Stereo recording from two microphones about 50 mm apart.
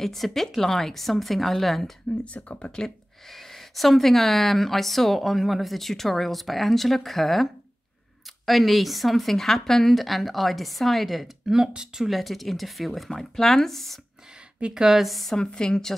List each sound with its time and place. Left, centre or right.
0.0 s speech: centre
2.1 s speech: left
2.7 s speech: centre
8.5 s speech: centre
11.6 s a woman's voice: centre
12.1 s speech: centre
14.6 s a woman's voice: centre
15.3 s a woman's voice: centre